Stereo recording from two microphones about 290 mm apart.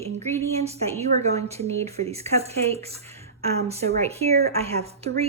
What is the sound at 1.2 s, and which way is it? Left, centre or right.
Speech, right.